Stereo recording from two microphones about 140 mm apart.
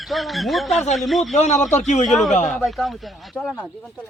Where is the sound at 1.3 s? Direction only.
55° left (ahead or behind).